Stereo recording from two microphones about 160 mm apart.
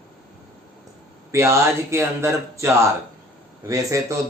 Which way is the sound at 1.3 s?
15° right (ahead or behind).